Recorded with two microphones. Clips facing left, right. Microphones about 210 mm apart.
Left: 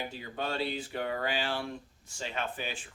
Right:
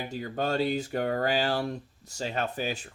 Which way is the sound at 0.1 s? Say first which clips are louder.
Right 6 dB; 45° right (ahead or behind).